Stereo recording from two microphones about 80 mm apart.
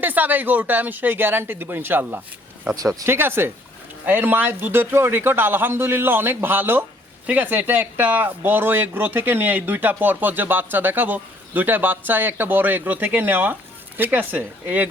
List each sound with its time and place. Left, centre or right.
0.0 s speech: right